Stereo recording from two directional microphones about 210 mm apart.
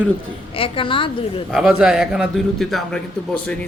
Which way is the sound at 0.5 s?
25° left (ahead or behind).